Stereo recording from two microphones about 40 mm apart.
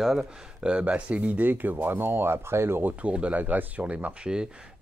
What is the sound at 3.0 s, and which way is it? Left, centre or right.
Speech, right.